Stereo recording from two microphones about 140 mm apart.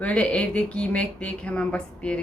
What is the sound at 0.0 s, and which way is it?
Speech, 10° left (ahead or behind).